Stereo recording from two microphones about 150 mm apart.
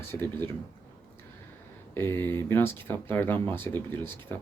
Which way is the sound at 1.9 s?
15° left (ahead or behind).